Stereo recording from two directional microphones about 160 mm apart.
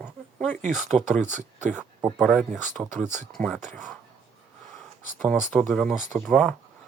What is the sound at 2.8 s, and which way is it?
Speech, 20° right (ahead or behind).